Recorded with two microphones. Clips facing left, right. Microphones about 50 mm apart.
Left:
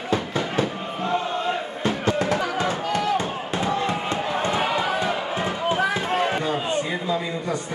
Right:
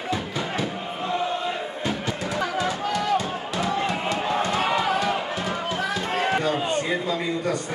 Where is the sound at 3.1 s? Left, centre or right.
Left.